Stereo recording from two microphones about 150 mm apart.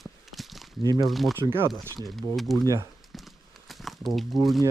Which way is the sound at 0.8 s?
25° right (ahead or behind).